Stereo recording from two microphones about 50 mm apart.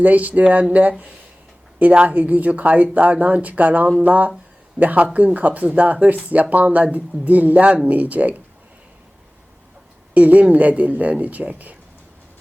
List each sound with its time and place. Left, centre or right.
0.0 s speech: right
10.2 s speech: right